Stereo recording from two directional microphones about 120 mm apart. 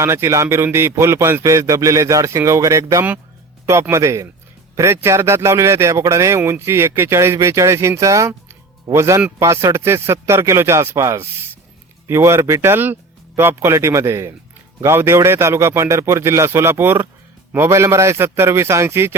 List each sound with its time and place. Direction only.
0.0 s a man's voice: 25° right (ahead or behind)